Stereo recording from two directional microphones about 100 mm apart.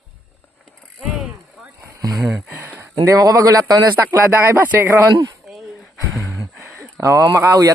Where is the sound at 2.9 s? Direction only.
40° right (ahead or behind).